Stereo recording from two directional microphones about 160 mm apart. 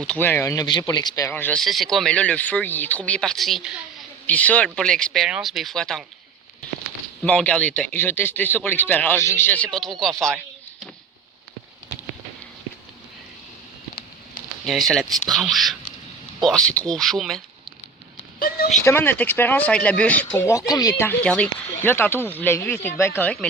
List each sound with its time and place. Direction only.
0.0 s speech: 10° left (ahead or behind)
1.3 s speech: 10° left (ahead or behind); by 3.8 s 5° right (ahead or behind)
4.3 s speech: 10° left (ahead or behind)
7.2 s a man's voice: 5° left (ahead or behind)
9.7 s speech: centre (ahead or behind)
14.6 s speech: centre (ahead or behind)
18.3 s a sound: 70° left (ahead or behind)
18.9 s a man's voice: 15° left (ahead or behind)
21.0 s a man's voice: 10° left (ahead or behind)